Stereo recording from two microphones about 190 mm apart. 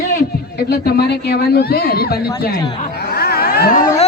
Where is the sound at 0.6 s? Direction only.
55° left (ahead or behind).